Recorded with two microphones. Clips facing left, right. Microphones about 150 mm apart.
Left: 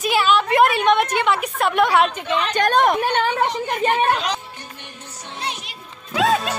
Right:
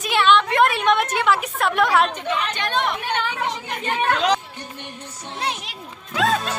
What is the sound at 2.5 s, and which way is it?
A woman's voice, 45° left (ahead or behind).